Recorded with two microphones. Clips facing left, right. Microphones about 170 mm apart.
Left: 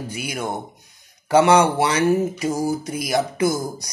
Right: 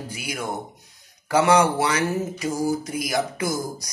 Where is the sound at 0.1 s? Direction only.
25° left (ahead or behind).